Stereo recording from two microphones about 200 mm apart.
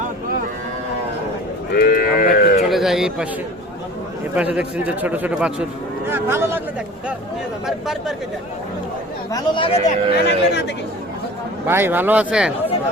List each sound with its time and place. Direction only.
1.7 s sheep: 50° left (ahead or behind)
2.6 s a sound: centre (ahead or behind)
4.4 s a man's voice: 5° right (ahead or behind)
9.3 s speech: 25° left (ahead or behind)
10.2 s speech: 55° left (ahead or behind)
11.6 s a man's voice: 10° right (ahead or behind)